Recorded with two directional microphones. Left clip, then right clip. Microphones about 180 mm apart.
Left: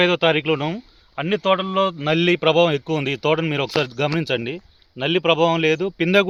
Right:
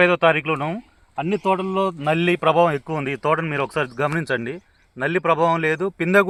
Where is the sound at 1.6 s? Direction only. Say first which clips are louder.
Left 1 dB; 65° left (ahead or behind); by 6.1 s 40° left (ahead or behind).